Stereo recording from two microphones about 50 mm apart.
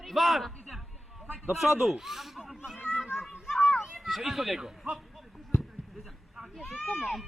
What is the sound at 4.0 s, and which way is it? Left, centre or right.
Speech, centre.